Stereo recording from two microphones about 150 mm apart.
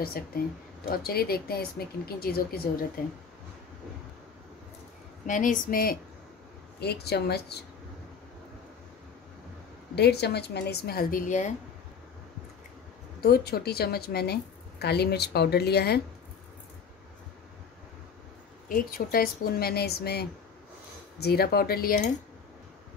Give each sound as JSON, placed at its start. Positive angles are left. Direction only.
{"t": 0.8, "sound": "a woman's voice", "side_deg": 90}
{"t": 3.0, "sound": "speech", "side_deg": 70}
{"t": 5.2, "sound": "speech", "side_deg": 60}
{"t": 6.8, "sound": "a woman's voice", "side_deg": 90}
{"t": 9.9, "sound": "a woman's voice", "side_deg": 90}
{"t": 13.2, "sound": "a woman's voice", "side_deg": 90}
{"t": 18.7, "sound": "a woman's voice", "side_deg": 70}